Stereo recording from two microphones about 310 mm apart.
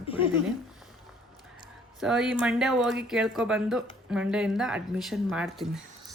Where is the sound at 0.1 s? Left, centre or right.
Centre.